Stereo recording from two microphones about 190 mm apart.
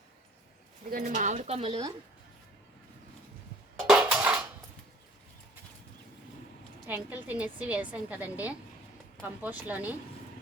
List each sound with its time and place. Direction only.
0.9 s speech: 45° right (ahead or behind)
3.8 s dishes: 5° right (ahead or behind)
6.8 s a woman's voice: 10° right (ahead or behind)